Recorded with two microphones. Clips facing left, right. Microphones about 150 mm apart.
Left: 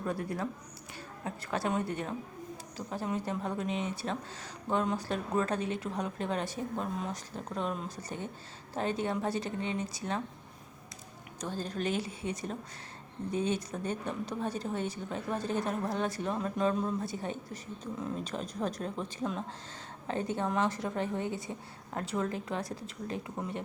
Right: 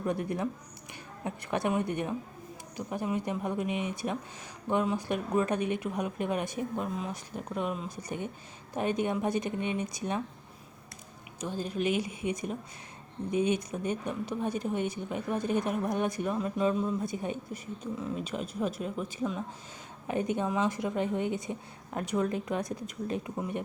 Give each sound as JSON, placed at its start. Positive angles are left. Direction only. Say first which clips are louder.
{"t": 0.0, "sound": "a woman's voice", "louder": "right 3 dB", "side_deg": -20}
{"t": 11.3, "sound": "a woman's voice", "louder": "right 3 dB", "side_deg": -10}
{"t": 20.1, "sound": "a woman's voice", "louder": "right 3 dB", "side_deg": -15}